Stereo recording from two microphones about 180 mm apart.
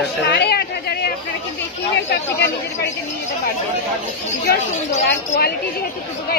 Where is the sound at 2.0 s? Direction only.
65° left (ahead or behind).